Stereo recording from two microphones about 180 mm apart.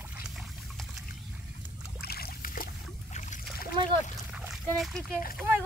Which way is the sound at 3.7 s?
25° right (ahead or behind).